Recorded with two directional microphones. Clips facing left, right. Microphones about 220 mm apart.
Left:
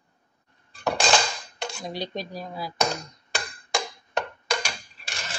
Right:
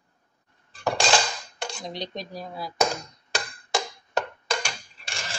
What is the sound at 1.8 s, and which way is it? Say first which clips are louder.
Speech: left 4 dB; 5° left (ahead or behind).